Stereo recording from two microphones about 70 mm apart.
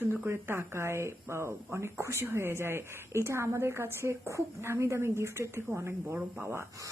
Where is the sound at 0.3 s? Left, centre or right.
Right.